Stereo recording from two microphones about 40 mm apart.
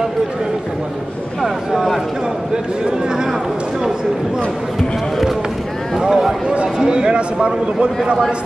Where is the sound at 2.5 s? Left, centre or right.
Centre.